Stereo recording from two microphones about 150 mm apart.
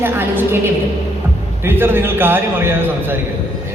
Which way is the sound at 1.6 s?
15° right (ahead or behind).